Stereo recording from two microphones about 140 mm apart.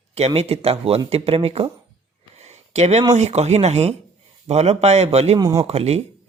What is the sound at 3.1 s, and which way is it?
Speech, 50° right (ahead or behind).